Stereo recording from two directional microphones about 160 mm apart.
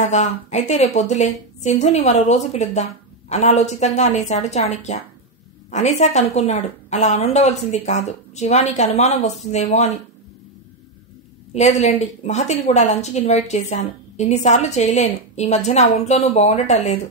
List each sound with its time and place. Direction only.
0.0 s a woman's voice: 50° left (ahead or behind)
11.5 s a woman's voice: 45° left (ahead or behind)